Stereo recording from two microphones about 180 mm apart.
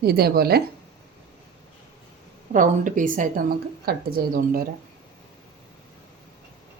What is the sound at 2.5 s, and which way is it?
Speech, 45° right (ahead or behind).